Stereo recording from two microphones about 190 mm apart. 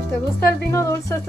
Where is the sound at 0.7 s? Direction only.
15° left (ahead or behind).